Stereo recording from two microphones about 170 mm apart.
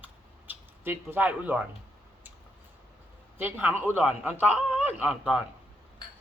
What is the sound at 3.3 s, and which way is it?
A man's voice, 10° right (ahead or behind).